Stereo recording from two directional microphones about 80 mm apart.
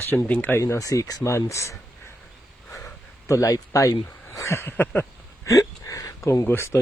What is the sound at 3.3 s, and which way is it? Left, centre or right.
Speech, left.